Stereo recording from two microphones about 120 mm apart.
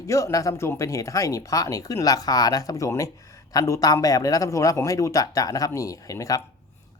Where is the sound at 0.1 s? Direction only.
25° left (ahead or behind).